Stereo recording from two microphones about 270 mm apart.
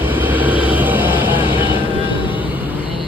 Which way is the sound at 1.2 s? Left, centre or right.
Centre.